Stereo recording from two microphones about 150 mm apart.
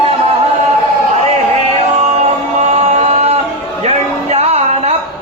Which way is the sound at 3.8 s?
45° right (ahead or behind).